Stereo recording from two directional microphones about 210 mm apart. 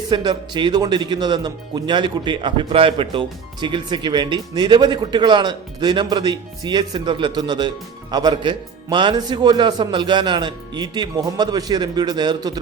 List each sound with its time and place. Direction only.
0.1 s speech: 20° right (ahead or behind)